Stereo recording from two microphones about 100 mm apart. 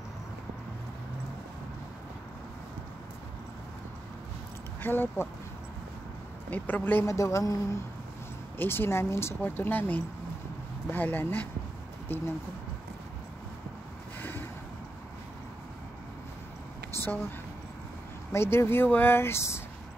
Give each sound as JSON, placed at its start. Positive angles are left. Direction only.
{"t": 4.8, "sound": "speech", "side_deg": 20}
{"t": 6.5, "sound": "speech", "side_deg": 20}
{"t": 16.9, "sound": "a sound", "side_deg": 20}
{"t": 18.3, "sound": "speech", "side_deg": 25}